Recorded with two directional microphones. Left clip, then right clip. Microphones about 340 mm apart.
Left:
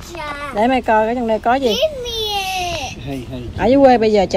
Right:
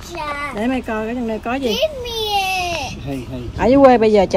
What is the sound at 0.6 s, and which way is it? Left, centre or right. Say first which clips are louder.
Speech: left 11 dB; centre.